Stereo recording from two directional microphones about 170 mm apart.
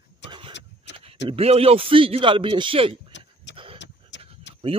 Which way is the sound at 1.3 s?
35° right (ahead or behind).